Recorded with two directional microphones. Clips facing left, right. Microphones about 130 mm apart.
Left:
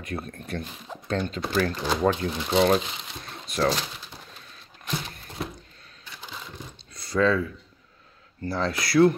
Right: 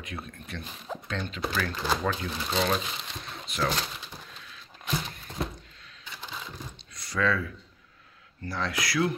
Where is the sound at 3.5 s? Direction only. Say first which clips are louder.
Left 5 dB; 35° left (ahead or behind).